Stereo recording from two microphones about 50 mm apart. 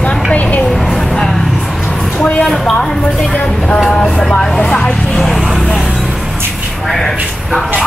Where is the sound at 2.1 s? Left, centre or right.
Left.